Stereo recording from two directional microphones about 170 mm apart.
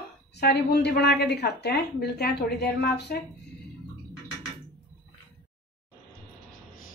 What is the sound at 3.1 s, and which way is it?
Speech, 60° left (ahead or behind).